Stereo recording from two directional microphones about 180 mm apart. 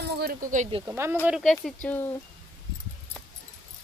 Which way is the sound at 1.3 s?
Centre (ahead or behind).